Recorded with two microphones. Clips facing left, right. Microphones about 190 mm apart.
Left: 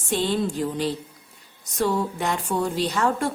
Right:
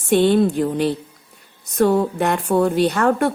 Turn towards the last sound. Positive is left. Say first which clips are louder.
# right 6 dB
turn(degrees=-60)  # may be behind; listen again after turning